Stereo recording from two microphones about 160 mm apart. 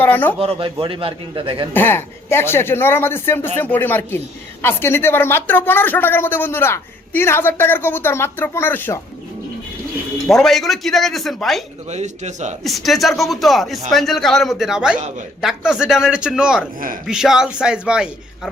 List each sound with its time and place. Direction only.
0.0 s a woman's voice: 10° left (ahead or behind)
0.3 s a man's voice: 35° right (ahead or behind)
1.7 s a woman's voice: 15° left (ahead or behind)
10.2 s speech: centre (ahead or behind)
11.9 s a man's voice: 45° right (ahead or behind)
12.6 s speech: centre (ahead or behind)